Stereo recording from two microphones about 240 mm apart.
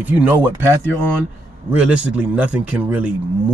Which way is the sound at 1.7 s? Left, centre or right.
Centre.